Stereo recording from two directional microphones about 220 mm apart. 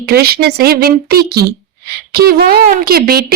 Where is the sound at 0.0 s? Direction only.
45° right (ahead or behind).